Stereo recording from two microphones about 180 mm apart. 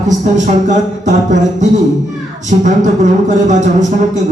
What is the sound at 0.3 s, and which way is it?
Speech, 40° right (ahead or behind).